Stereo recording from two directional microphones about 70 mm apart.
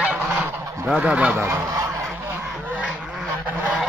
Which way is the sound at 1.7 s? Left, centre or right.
Right.